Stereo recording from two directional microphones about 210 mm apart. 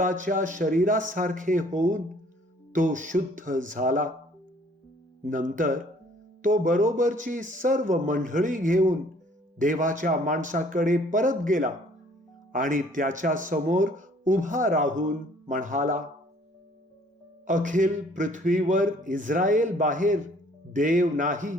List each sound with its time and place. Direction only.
0.0 s speech: 40° right (ahead or behind)
5.2 s speech: 40° right (ahead or behind)
17.4 s speech: 40° right (ahead or behind)